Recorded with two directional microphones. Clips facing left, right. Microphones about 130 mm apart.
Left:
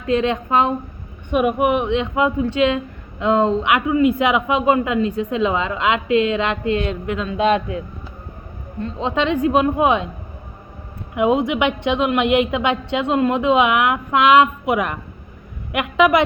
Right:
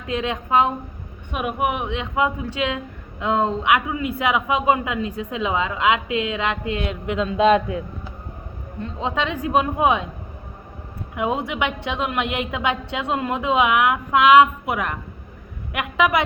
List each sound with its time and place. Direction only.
0.1 s a man's voice: 5° right (ahead or behind)
8.8 s a man's voice: 5° right (ahead or behind)
11.1 s a woman's voice: centre (ahead or behind)